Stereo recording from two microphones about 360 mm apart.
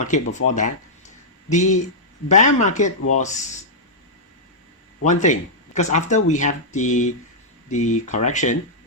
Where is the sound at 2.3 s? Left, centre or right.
Centre.